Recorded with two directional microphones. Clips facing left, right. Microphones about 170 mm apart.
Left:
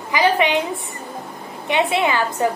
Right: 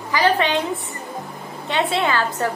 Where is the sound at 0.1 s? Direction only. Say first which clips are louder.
Left 1 dB; 15° left (ahead or behind).